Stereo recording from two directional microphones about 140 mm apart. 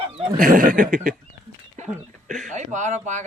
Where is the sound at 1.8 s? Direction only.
65° right (ahead or behind).